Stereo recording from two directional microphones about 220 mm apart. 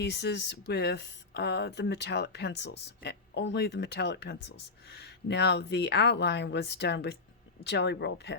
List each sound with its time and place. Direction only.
0.0 s speech: 50° left (ahead or behind)